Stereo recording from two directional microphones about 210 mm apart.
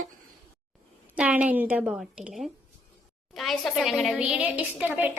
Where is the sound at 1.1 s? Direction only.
5° right (ahead or behind).